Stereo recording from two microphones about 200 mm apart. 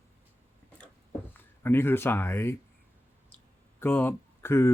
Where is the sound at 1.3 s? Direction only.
10° left (ahead or behind).